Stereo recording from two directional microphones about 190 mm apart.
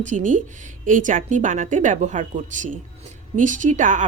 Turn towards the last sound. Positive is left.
turn(degrees=-40)  # may be behind; listen again after turning